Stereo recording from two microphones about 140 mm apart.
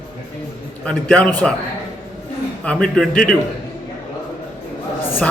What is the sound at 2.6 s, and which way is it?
Speech, 5° left (ahead or behind).